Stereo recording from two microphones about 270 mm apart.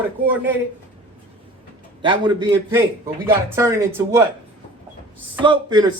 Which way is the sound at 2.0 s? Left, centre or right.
Centre.